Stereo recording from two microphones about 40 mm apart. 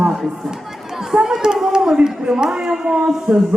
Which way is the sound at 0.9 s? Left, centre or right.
Centre.